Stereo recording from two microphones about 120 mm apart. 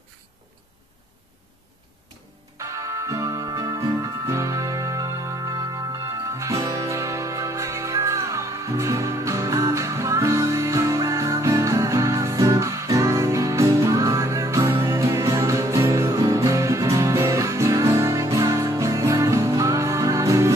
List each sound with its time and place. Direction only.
2.5 s music: 25° right (ahead or behind)